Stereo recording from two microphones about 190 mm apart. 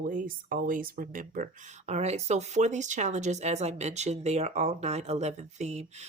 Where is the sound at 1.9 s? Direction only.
35° right (ahead or behind).